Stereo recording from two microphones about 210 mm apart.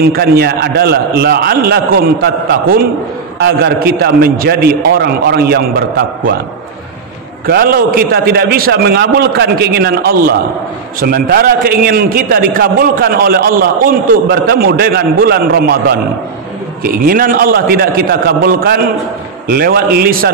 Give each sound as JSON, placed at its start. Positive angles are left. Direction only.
{"t": 0.0, "sound": "a man's voice", "side_deg": -50}
{"t": 7.4, "sound": "a man's voice", "side_deg": -45}
{"t": 16.8, "sound": "a man's voice", "side_deg": -45}